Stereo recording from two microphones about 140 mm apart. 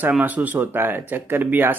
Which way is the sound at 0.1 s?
10° right (ahead or behind).